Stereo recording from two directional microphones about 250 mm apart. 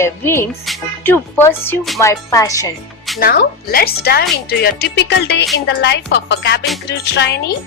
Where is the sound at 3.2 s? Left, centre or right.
Left.